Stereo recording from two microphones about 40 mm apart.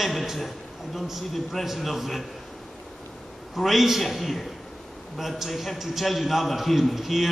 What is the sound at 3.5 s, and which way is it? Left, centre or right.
A man's voice, centre.